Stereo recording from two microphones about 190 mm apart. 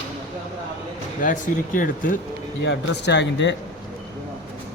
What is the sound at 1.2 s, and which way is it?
Speech, 45° left (ahead or behind).